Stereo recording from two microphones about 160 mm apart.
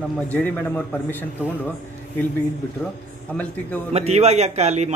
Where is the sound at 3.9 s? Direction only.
40° right (ahead or behind).